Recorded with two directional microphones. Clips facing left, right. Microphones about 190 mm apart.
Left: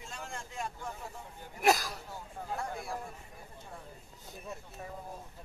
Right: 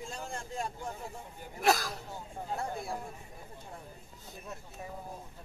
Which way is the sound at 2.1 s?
25° right (ahead or behind).